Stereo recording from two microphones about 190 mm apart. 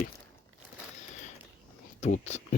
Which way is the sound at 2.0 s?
35° left (ahead or behind).